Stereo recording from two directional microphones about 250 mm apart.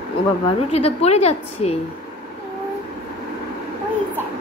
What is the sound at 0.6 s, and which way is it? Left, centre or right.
A woman's voice, left.